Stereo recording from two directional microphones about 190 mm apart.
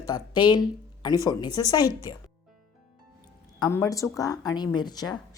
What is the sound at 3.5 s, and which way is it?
Speech, 20° left (ahead or behind).